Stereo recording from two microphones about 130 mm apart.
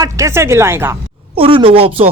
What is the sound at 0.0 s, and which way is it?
Speech, 25° right (ahead or behind).